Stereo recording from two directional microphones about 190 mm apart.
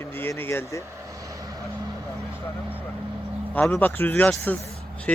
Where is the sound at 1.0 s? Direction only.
15° right (ahead or behind).